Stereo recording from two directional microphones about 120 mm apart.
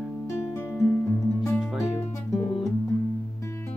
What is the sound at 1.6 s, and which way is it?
Music, centre (ahead or behind).